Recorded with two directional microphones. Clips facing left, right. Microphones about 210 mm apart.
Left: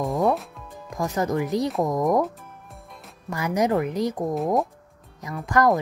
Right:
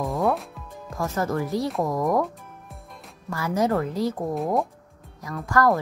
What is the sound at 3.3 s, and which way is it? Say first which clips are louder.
Speech: left 1 dB; 20° left (ahead or behind).